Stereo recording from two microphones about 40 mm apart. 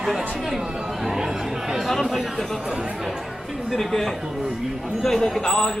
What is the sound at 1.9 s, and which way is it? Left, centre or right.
Speech, centre.